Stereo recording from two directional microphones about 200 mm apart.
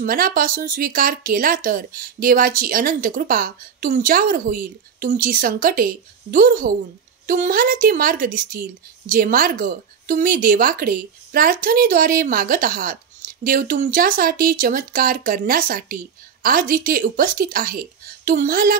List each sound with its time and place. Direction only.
0.0 s a woman's voice: 45° right (ahead or behind)